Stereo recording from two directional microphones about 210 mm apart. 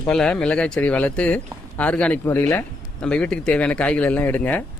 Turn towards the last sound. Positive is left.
turn(degrees=10)  # may be behind; listen again after turning